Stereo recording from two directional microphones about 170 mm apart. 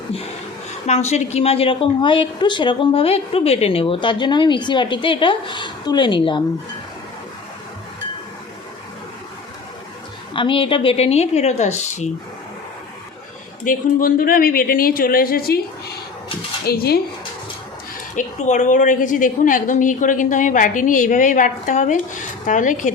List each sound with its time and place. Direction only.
0.9 s a woman's voice: 40° left (ahead or behind)
10.3 s a woman's voice: 30° left (ahead or behind)
13.7 s speech: 55° left (ahead or behind)
16.6 s speech: 65° left (ahead or behind)
18.1 s a woman's voice: 45° left (ahead or behind)